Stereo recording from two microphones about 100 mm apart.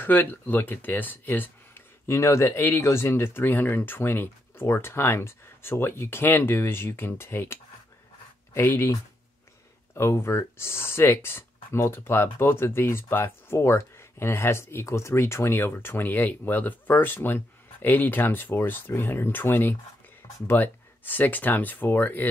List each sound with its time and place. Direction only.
0.0 s speech: 20° left (ahead or behind)
8.5 s speech: 25° left (ahead or behind)
9.9 s speech: 25° left (ahead or behind)